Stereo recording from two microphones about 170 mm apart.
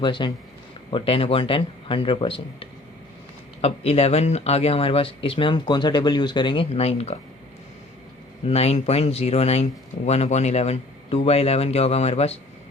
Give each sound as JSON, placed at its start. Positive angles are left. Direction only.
{"t": 0.0, "sound": "speech", "side_deg": 30}
{"t": 8.4, "sound": "speech", "side_deg": 35}